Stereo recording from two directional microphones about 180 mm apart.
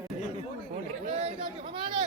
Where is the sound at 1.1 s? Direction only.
35° right (ahead or behind).